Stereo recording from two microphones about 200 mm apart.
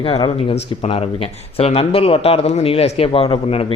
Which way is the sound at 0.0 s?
25° left (ahead or behind).